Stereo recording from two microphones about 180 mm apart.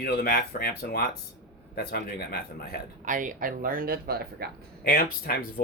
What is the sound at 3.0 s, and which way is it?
Speech, 45° right (ahead or behind).